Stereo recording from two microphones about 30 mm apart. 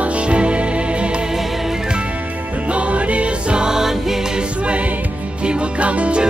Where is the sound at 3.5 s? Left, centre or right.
Right.